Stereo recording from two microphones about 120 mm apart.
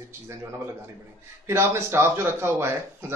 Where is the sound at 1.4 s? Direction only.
20° right (ahead or behind).